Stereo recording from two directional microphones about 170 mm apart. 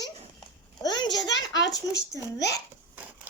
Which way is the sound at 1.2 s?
90° left.